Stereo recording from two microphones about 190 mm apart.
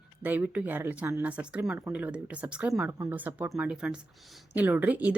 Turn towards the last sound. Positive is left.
turn(degrees=-10)  # may be behind; listen again after turning